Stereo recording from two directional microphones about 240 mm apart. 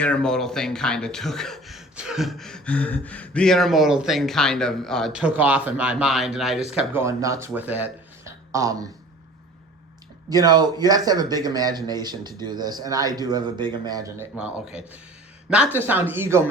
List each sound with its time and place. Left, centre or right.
0.0 s speech: centre
10.2 s a man's voice: centre